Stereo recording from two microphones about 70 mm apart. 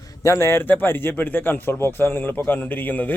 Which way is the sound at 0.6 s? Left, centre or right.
Left.